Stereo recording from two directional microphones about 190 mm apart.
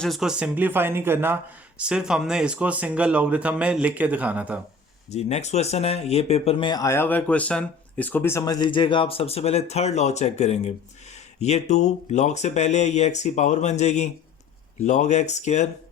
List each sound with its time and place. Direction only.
0.0 s speech: centre (ahead or behind)
5.1 s speech: 35° left (ahead or behind)